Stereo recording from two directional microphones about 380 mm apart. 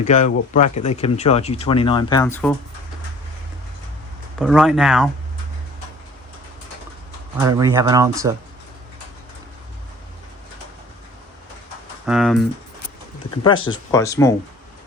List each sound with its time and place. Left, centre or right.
0.0 s speech: centre
4.4 s speech: centre
7.3 s speech: centre
12.0 s speech: centre
13.7 s speech: centre